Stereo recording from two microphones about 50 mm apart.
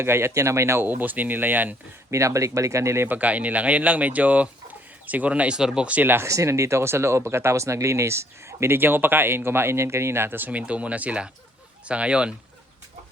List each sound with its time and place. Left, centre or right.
0.0 s speech: right
0.9 s speech: right
2.0 s speech: right
3.1 s speech: right
5.5 s speech: centre
5.9 s speech: right
6.2 s speech: right
8.8 s speech: right
10.5 s speech: right